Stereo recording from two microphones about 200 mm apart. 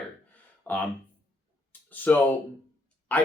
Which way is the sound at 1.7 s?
10° left (ahead or behind).